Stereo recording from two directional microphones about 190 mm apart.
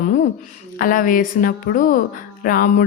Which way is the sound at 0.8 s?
45° left (ahead or behind).